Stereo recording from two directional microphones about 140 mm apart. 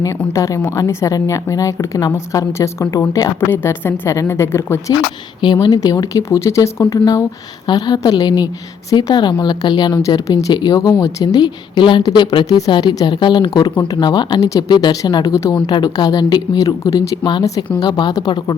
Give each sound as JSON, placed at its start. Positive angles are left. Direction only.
{"t": 0.0, "sound": "a woman's voice", "side_deg": 25}
{"t": 5.4, "sound": "a woman's voice", "side_deg": 30}